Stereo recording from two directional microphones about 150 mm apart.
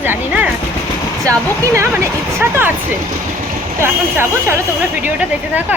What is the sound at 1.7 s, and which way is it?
Speech, 20° right (ahead or behind).